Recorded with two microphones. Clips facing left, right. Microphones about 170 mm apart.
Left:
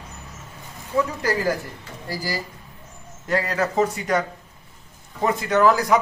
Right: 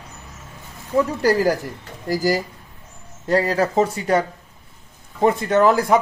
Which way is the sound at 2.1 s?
45° right (ahead or behind).